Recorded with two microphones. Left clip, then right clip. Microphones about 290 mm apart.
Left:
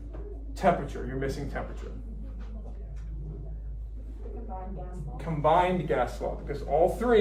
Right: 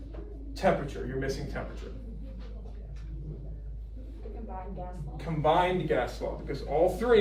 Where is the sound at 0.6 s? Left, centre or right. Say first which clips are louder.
Left 2 dB; left.